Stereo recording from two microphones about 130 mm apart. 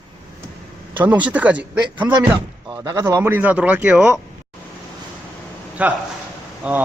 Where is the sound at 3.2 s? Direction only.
15° right (ahead or behind).